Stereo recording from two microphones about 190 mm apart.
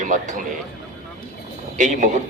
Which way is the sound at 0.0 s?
40° right (ahead or behind).